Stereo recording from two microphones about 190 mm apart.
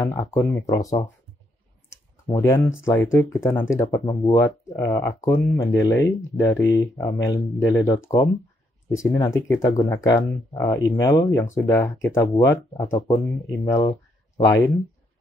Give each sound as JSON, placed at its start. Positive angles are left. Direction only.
{"t": 0.0, "sound": "speech", "side_deg": 15}
{"t": 1.9, "sound": "clicking", "side_deg": 20}
{"t": 2.8, "sound": "speech", "side_deg": 15}
{"t": 9.5, "sound": "speech", "side_deg": 15}